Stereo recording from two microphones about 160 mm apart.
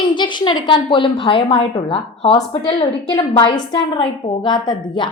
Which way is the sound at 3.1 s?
30° left (ahead or behind).